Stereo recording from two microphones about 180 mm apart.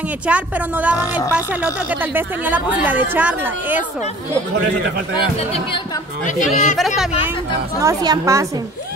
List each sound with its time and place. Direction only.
0.3 s a woman's voice: 5° right (ahead or behind)
6.2 s speech: 45° left (ahead or behind)
7.8 s a woman's voice: 20° right (ahead or behind)